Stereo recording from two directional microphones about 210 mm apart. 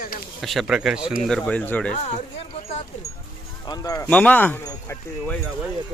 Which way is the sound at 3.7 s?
15° left (ahead or behind).